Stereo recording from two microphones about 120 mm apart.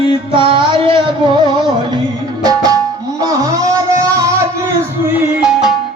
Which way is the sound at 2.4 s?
30° right (ahead or behind).